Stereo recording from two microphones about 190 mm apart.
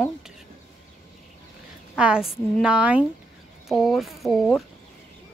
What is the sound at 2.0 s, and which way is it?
A woman's voice, 5° right (ahead or behind).